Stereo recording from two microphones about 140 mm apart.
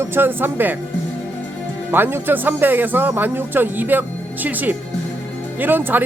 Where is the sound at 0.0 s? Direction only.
15° right (ahead or behind).